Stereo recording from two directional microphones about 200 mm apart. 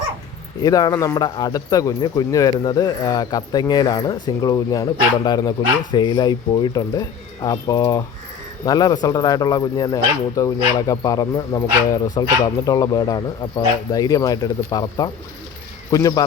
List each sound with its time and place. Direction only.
0.6 s speech: 20° left (ahead or behind)